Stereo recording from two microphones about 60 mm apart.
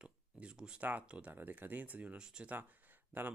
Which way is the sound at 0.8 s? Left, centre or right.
Right.